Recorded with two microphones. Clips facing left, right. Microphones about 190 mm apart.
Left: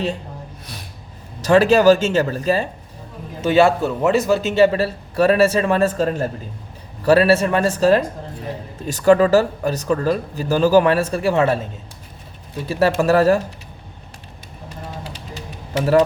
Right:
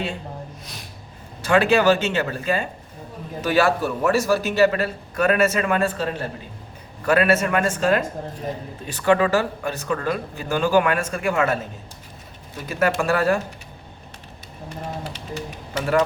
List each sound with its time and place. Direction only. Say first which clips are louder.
1.4 s speech: left 4 dB; 40° left (ahead or behind)
3.4 s a man's voice: left 5 dB; 25° left (ahead or behind); by 6.3 s 45° left (ahead or behind)
7.0 s speech: left 5 dB; 35° left (ahead or behind)